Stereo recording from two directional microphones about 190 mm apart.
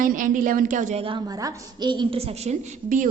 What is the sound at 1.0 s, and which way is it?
A woman's voice, 20° right (ahead or behind).